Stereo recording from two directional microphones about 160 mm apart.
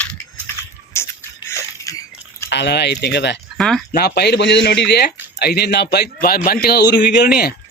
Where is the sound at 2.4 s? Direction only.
90° left.